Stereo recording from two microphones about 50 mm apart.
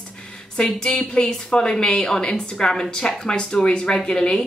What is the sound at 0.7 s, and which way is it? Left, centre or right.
Speech, centre.